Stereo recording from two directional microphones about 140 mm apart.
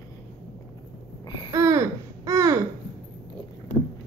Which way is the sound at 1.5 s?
20° right (ahead or behind).